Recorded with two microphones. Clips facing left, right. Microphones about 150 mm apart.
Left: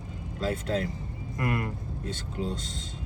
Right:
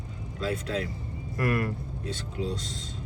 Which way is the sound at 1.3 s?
20° left (ahead or behind).